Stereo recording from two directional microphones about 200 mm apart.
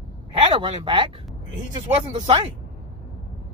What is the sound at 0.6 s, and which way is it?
Speech, 25° right (ahead or behind).